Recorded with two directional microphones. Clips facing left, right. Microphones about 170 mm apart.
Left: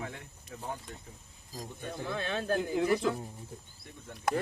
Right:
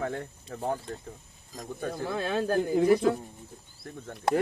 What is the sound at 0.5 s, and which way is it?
Speech, 65° right (ahead or behind).